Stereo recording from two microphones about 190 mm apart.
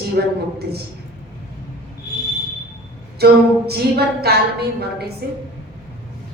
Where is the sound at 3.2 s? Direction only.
55° right (ahead or behind).